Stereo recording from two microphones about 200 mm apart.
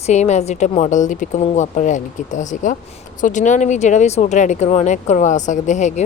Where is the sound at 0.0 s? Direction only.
35° left (ahead or behind).